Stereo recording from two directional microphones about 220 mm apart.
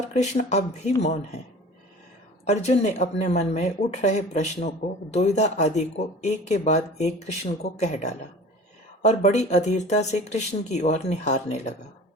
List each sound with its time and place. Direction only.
0.1 s speech: 30° left (ahead or behind)
2.5 s speech: 30° left (ahead or behind)